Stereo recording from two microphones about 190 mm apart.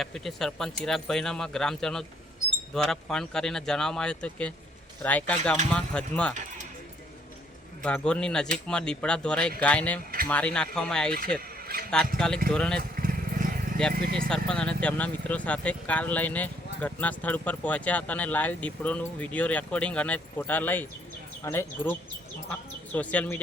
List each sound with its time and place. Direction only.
0.0 s speech: centre (ahead or behind)
7.8 s speech: 5° left (ahead or behind)
13.0 s vehicle: 45° right (ahead or behind)
13.9 s speech: 50° right (ahead or behind)
14.3 s speech: 5° left (ahead or behind)